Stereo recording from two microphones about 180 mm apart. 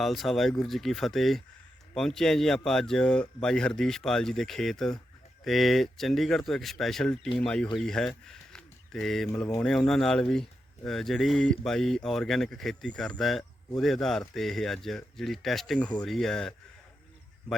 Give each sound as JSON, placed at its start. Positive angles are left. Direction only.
{"t": 0.0, "sound": "speech", "side_deg": 0}